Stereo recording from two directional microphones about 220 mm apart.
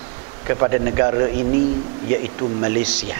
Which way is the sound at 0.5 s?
15° right (ahead or behind).